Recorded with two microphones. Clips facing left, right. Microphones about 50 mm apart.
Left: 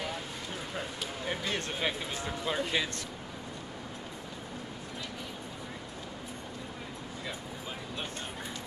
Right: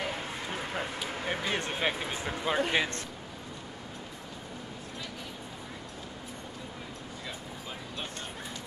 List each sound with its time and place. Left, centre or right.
0.0 s a sound: right
1.0 s speech: right
1.3 s speech: right